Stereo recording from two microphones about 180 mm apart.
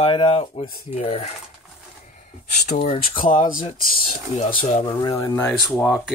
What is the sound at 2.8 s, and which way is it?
Speech, 30° left (ahead or behind).